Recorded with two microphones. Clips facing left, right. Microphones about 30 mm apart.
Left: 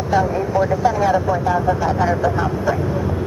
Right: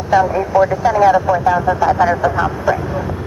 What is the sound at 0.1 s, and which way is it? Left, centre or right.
Speech, right.